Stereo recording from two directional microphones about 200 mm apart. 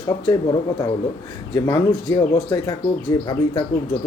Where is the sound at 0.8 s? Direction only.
20° left (ahead or behind).